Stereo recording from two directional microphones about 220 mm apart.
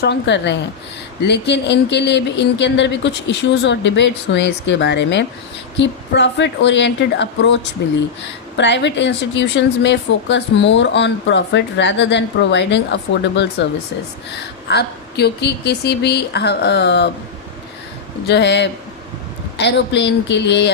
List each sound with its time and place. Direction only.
0.0 s speech: 50° left (ahead or behind)
14.7 s speech: 50° left (ahead or behind)
18.3 s speech: 50° left (ahead or behind)